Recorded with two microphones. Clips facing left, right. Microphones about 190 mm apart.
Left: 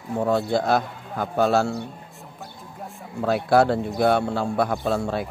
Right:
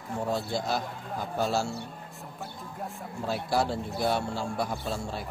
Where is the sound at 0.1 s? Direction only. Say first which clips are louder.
Left 8 dB; 65° left (ahead or behind).